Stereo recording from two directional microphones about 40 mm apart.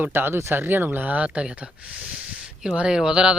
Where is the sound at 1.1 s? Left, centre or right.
Right.